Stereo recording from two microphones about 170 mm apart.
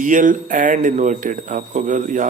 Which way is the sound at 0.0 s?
50° right (ahead or behind).